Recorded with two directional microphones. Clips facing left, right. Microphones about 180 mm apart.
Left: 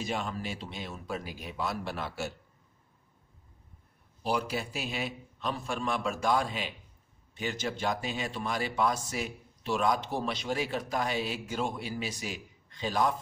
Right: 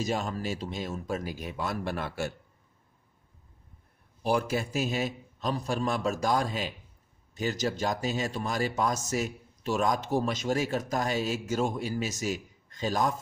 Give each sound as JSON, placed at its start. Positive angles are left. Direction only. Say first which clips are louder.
{"t": 0.0, "sound": "speech", "louder": "right 3 dB", "side_deg": -40}
{"t": 4.2, "sound": "a man's voice", "louder": "right 4 dB", "side_deg": -50}